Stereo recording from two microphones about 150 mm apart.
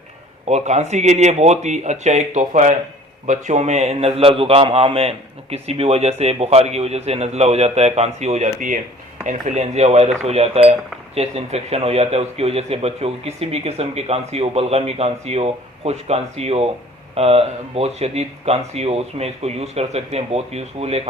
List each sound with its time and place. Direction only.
0.4 s speech: 50° right (ahead or behind)